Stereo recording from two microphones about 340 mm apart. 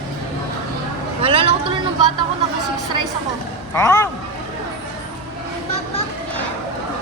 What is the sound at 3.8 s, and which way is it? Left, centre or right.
Speech, centre.